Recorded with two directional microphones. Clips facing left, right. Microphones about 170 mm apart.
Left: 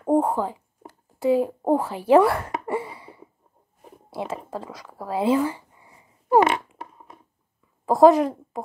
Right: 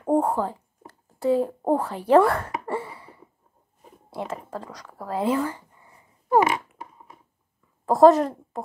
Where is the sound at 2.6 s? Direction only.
15° left (ahead or behind).